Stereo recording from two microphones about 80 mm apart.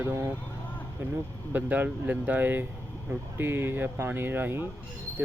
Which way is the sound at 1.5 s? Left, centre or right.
Right.